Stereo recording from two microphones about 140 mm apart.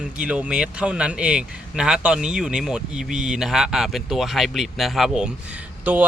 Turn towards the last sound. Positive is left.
turn(degrees=-10)  # may be behind; listen again after turning